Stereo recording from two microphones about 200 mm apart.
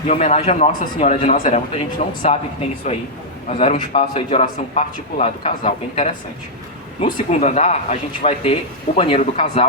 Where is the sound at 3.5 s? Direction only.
30° left (ahead or behind).